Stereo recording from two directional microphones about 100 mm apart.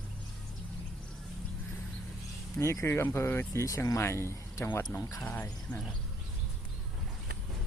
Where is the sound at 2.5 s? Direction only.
30° left (ahead or behind).